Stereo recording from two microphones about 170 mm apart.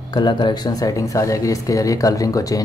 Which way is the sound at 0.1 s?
25° left (ahead or behind).